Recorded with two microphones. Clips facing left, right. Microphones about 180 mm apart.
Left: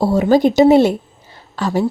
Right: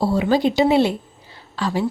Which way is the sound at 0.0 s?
45° left (ahead or behind).